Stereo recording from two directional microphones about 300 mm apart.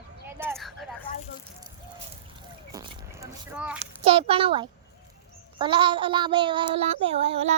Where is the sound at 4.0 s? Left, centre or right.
Centre.